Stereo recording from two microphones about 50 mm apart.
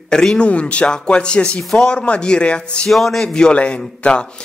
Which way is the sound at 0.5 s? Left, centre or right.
Left.